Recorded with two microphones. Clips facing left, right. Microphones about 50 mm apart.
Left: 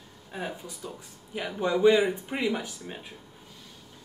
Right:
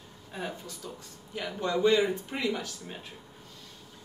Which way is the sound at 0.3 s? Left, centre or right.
Centre.